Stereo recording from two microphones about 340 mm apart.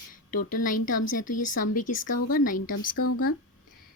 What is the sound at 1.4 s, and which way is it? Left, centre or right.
Speech, left.